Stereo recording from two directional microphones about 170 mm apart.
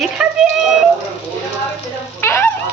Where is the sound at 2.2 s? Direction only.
15° left (ahead or behind).